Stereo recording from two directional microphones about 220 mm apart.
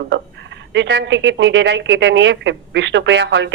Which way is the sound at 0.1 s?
55° right (ahead or behind).